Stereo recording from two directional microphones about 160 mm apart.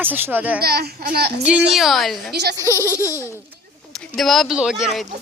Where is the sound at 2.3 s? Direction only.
90° right.